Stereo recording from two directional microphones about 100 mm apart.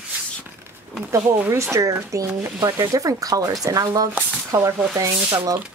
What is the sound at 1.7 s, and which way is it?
A woman's voice, 30° right (ahead or behind).